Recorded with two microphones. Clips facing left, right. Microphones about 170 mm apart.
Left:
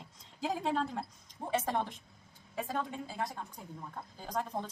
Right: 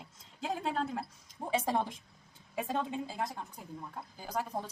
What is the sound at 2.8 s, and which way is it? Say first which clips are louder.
Speech: right 2 dB; 25° right (ahead or behind).